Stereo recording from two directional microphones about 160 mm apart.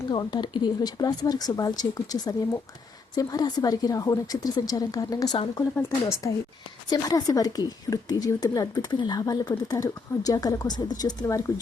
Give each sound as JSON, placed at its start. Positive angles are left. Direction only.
{"t": 0.1, "sound": "a woman's voice", "side_deg": 30}